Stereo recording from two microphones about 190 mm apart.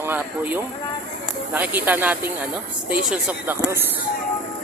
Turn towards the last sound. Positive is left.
turn(degrees=-5)  # may be behind; listen again after turning